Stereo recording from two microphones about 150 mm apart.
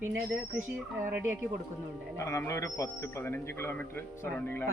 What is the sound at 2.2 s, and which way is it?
A man's voice, 20° left (ahead or behind).